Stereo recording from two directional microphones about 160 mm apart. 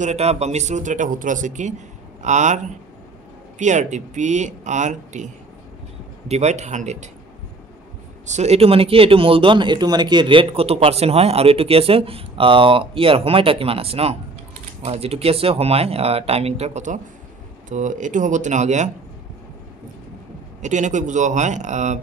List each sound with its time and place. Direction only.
0.0 s speech: 40° right (ahead or behind)
8.3 s speech: 45° right (ahead or behind)
20.6 s speech: 50° right (ahead or behind)